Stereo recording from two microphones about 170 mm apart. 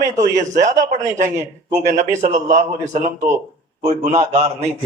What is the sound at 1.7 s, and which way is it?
A man's voice, 45° right (ahead or behind).